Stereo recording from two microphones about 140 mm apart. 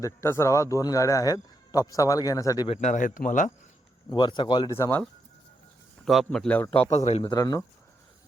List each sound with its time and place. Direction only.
0.0 s a man's voice: 20° left (ahead or behind)
2.7 s speech: 60° left (ahead or behind)
4.1 s speech: 35° left (ahead or behind)
4.7 s speech: 15° left (ahead or behind)
6.1 s speech: centre (ahead or behind)
6.9 s speech: 50° left (ahead or behind)
7.3 s a man's voice: 25° left (ahead or behind)